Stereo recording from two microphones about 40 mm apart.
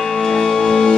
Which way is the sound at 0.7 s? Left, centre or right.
Centre.